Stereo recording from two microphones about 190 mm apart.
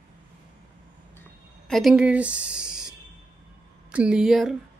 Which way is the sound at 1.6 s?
Centre (ahead or behind).